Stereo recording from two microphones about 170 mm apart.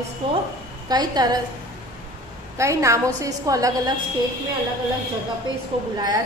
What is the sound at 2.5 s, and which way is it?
A woman's voice, 15° right (ahead or behind).